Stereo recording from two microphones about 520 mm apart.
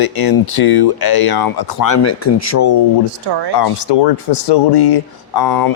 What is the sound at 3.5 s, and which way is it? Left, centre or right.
Speech, left.